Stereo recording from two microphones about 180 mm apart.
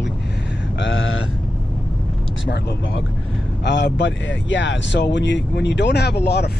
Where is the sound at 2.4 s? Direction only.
90° left.